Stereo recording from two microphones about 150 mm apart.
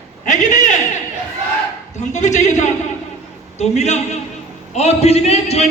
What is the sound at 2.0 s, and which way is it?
A man's voice, 55° left (ahead or behind).